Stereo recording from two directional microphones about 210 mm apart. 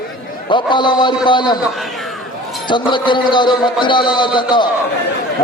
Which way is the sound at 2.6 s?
20° left (ahead or behind).